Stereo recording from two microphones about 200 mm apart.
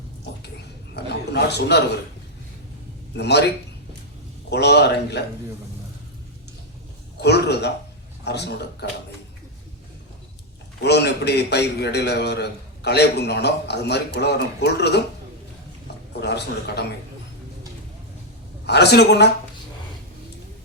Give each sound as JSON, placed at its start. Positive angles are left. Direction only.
{"t": 1.3, "sound": "a man's voice", "side_deg": 55}
{"t": 3.2, "sound": "a man's voice", "side_deg": 55}
{"t": 4.4, "sound": "a man's voice", "side_deg": 55}
{"t": 7.2, "sound": "a man's voice", "side_deg": 55}
{"t": 10.8, "sound": "a man's voice", "side_deg": 55}
{"t": 16.2, "sound": "a man's voice", "side_deg": 55}
{"t": 18.6, "sound": "a man's voice", "side_deg": 55}